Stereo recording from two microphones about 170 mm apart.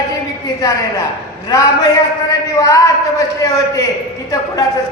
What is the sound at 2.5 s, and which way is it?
A man's voice, 20° left (ahead or behind).